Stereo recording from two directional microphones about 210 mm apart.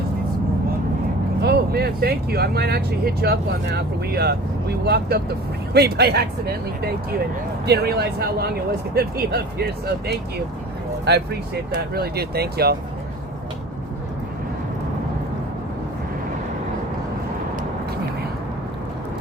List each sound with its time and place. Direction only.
1.4 s speech: 50° right (ahead or behind)
7.6 s speech: 50° right (ahead or behind)
11.7 s speech: 50° right (ahead or behind)